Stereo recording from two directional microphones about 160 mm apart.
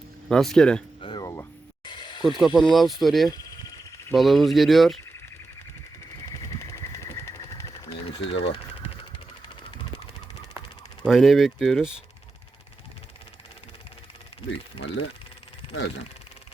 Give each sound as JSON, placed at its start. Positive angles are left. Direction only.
{"t": 0.3, "sound": "speech", "side_deg": 5}
{"t": 1.0, "sound": "a sound", "side_deg": 25}
{"t": 2.6, "sound": "speech", "side_deg": 0}
{"t": 6.2, "sound": "vehicle", "side_deg": 20}
{"t": 8.1, "sound": "a sound", "side_deg": 35}
{"t": 11.0, "sound": "speech", "side_deg": 0}